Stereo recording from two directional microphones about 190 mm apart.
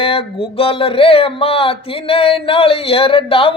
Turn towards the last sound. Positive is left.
turn(degrees=30)  # may be behind; listen again after turning